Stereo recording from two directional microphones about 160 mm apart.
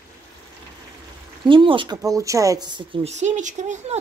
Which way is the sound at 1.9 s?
20° right (ahead or behind).